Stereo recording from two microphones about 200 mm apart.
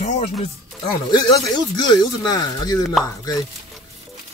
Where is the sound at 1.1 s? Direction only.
20° left (ahead or behind).